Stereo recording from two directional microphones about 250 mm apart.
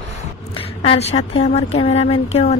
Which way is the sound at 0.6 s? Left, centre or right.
Left.